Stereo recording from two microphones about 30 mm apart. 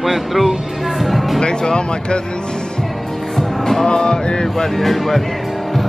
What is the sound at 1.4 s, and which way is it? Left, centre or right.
Chant, left.